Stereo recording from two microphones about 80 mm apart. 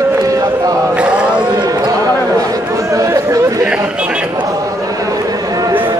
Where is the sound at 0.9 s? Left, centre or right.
Centre.